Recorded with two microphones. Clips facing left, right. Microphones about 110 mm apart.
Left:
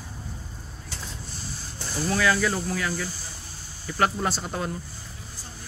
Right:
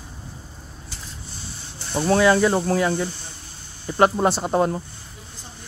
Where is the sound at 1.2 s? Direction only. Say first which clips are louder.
Even; centre (ahead or behind).